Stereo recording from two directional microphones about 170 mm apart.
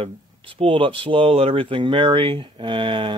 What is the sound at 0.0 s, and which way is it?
Speech, 35° right (ahead or behind).